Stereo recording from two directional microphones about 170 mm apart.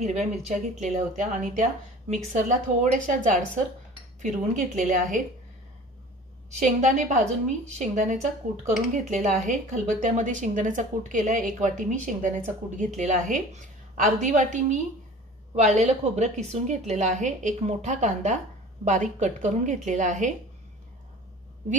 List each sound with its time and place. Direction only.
0.0 s speech: 40° right (ahead or behind)
6.8 s speech: 45° right (ahead or behind)